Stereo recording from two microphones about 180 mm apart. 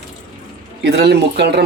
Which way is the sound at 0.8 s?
65° right (ahead or behind).